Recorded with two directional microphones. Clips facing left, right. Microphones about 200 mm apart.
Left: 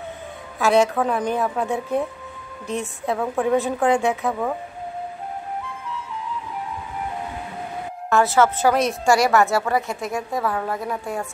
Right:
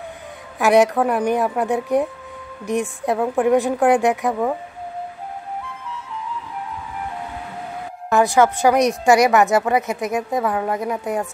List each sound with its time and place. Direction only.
0.6 s a woman's voice: 15° right (ahead or behind)
8.1 s a woman's voice: 15° right (ahead or behind)